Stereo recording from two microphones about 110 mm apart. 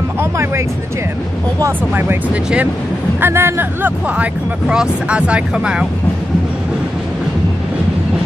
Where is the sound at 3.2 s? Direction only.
20° right (ahead or behind).